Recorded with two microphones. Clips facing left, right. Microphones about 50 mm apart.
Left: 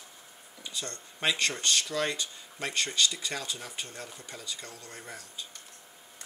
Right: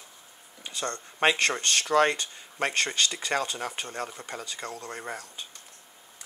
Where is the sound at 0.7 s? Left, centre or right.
Right.